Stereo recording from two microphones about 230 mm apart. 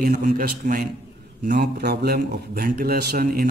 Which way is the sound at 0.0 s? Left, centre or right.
Right.